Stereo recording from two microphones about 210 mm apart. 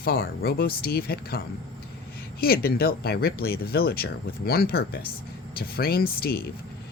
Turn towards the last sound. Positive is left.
turn(degrees=45)  # may be behind; listen again after turning